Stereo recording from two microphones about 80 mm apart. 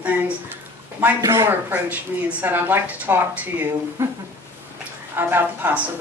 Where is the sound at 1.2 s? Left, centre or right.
Right.